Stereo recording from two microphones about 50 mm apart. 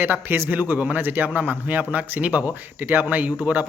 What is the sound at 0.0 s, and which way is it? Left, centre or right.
A man's voice, right.